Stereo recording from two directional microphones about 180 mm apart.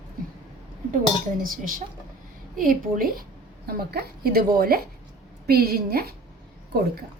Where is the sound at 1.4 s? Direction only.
50° right (ahead or behind).